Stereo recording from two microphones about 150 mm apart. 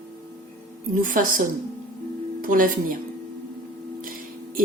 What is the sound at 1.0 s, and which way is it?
A woman's voice, 65° right (ahead or behind).